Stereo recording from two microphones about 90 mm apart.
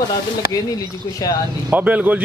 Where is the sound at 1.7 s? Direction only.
15° right (ahead or behind).